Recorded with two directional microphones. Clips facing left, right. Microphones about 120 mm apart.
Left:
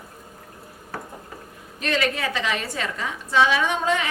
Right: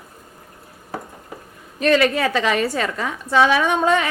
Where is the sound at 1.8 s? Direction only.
50° right (ahead or behind).